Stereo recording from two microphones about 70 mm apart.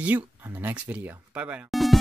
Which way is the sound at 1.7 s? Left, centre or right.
Centre.